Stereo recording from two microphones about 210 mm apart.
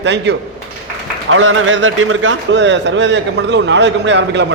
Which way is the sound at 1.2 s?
70° right (ahead or behind).